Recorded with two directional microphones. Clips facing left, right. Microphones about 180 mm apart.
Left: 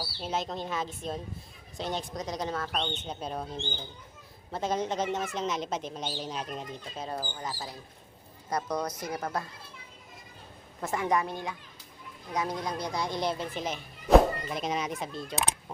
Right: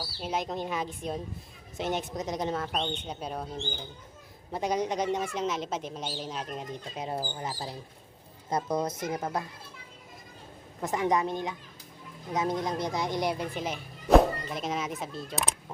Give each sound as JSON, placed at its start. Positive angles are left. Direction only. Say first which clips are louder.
{"t": 0.2, "sound": "speech", "louder": "right 2 dB", "side_deg": -10}
{"t": 2.8, "sound": "speech", "louder": "right 1 dB", "side_deg": -10}
{"t": 6.9, "sound": "speech", "louder": "right 2 dB", "side_deg": -20}
{"t": 10.8, "sound": "speech", "louder": "right 1 dB", "side_deg": -15}